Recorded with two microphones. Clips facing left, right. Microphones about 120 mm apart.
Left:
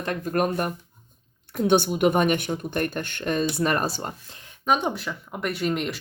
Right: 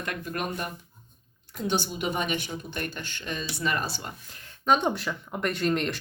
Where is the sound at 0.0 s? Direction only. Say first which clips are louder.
Left 8 dB; 35° left (ahead or behind).